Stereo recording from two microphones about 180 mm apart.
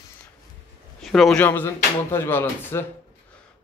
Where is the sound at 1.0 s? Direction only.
Centre (ahead or behind).